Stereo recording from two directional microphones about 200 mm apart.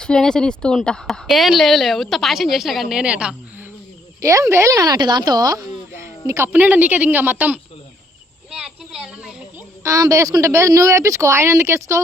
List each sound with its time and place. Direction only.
0.0 s speech: 5° left (ahead or behind)
8.4 s a sound: centre (ahead or behind)
9.8 s speech: 15° right (ahead or behind)